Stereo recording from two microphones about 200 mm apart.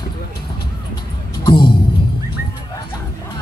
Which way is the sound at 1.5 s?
25° left (ahead or behind).